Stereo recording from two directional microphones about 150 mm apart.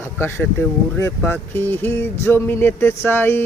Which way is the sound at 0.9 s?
15° left (ahead or behind).